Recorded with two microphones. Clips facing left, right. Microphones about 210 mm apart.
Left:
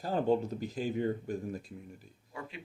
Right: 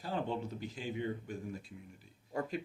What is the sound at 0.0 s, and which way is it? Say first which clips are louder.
Speech: left 8 dB; 40° left (ahead or behind).